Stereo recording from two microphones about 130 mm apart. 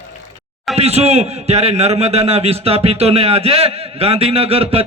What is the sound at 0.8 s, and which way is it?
A man's voice, 55° right (ahead or behind).